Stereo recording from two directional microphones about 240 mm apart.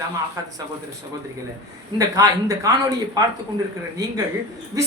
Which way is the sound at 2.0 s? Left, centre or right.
Centre.